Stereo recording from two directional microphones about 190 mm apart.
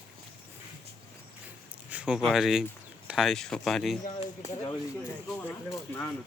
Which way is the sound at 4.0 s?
35° left (ahead or behind).